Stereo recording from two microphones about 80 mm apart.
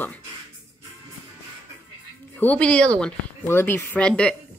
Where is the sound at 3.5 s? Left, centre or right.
Left.